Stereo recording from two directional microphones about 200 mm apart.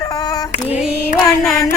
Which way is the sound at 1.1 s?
Centre (ahead or behind).